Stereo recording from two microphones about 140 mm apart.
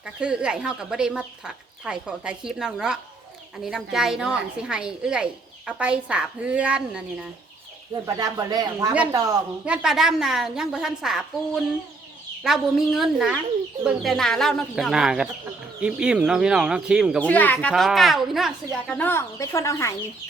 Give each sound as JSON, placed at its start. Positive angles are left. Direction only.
{"t": 0.0, "sound": "a woman's voice", "side_deg": -5}
{"t": 8.0, "sound": "speech", "side_deg": -25}
{"t": 9.6, "sound": "speech", "side_deg": -5}
{"t": 17.2, "sound": "speech", "side_deg": 10}
{"t": 18.9, "sound": "speech", "side_deg": 15}